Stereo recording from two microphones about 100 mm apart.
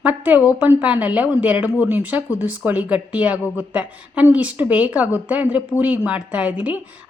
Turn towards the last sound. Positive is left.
turn(degrees=-15)  # may be behind; listen again after turning